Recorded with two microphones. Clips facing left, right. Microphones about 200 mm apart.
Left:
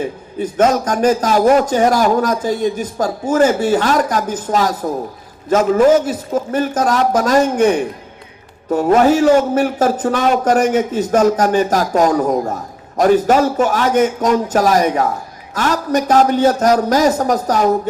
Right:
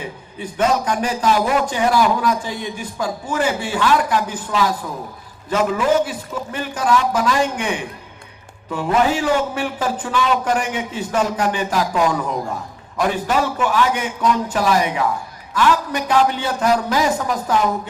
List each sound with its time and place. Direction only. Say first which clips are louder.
0.0 s a man's voice: left 9 dB; 45° left (ahead or behind)